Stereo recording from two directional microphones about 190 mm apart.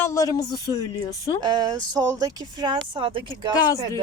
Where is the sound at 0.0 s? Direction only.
15° left (ahead or behind).